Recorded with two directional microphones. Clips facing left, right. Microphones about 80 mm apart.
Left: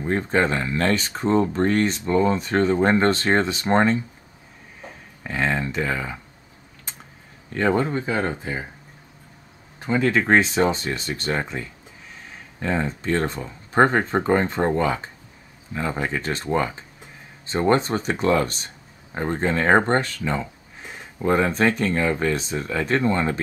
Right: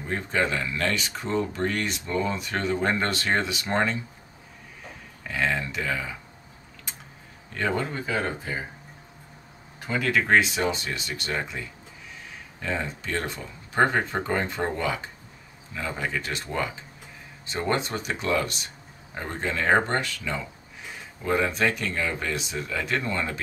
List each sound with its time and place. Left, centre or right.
0.0 s speech: left
5.2 s speech: left
7.5 s speech: left
9.8 s speech: left